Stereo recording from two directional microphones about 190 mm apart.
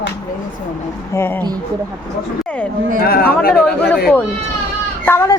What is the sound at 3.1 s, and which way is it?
Speech, 50° left (ahead or behind).